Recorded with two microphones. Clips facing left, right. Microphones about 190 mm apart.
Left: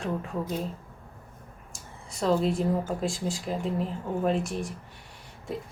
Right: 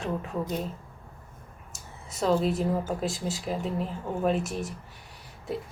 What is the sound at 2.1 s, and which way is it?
Speech, 5° right (ahead or behind).